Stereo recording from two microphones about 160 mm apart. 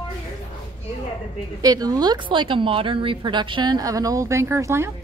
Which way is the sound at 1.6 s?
25° right (ahead or behind).